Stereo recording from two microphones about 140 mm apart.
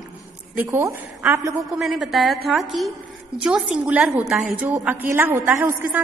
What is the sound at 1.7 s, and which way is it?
A woman's voice, centre (ahead or behind).